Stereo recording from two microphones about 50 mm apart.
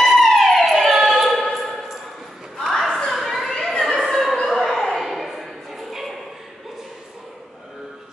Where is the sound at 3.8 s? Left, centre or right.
Centre.